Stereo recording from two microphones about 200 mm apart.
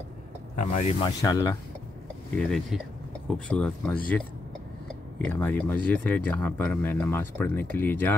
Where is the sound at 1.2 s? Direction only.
15° left (ahead or behind).